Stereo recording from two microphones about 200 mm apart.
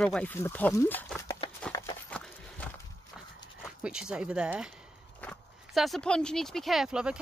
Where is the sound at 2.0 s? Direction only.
5° left (ahead or behind).